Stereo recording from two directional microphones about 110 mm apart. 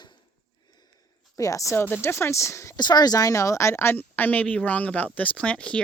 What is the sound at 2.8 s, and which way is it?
A woman's voice, 40° left (ahead or behind).